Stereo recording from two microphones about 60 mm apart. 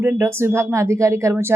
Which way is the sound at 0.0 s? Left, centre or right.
Right.